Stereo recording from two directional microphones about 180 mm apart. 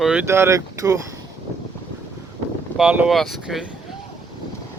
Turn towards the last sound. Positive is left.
turn(degrees=-5)  # may be behind; listen again after turning